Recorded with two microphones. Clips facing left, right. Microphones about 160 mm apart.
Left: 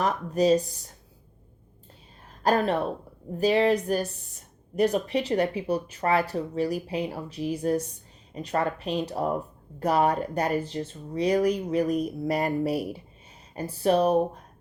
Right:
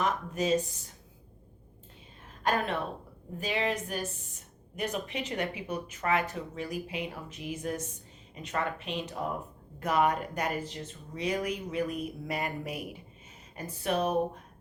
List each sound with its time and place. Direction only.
0.0 s a woman's voice: 35° left (ahead or behind)
2.4 s a woman's voice: 35° left (ahead or behind)